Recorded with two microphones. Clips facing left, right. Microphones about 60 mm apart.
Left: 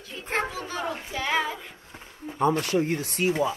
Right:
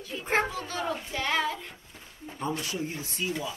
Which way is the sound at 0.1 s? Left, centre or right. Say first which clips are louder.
Right 2 dB; centre.